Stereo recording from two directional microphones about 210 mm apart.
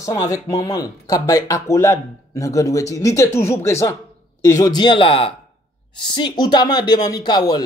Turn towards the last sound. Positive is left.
turn(degrees=20)  # may be behind; listen again after turning